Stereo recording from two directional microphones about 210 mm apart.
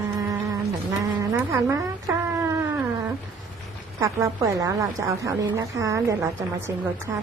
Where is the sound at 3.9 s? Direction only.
15° right (ahead or behind).